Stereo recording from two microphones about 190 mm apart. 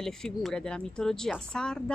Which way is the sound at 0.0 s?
Centre (ahead or behind).